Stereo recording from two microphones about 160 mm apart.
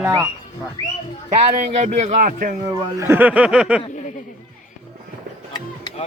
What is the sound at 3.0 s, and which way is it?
Speech, 15° right (ahead or behind).